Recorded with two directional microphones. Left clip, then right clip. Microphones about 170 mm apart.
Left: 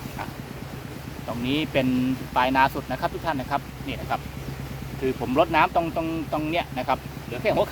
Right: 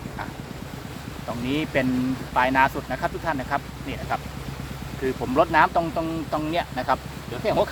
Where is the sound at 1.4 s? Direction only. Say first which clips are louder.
Even; centre (ahead or behind).